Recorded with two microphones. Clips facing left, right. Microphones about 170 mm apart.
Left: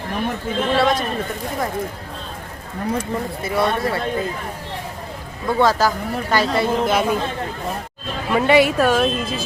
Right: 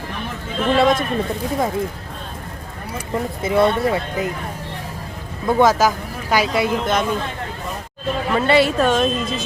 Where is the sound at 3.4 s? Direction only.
20° right (ahead or behind).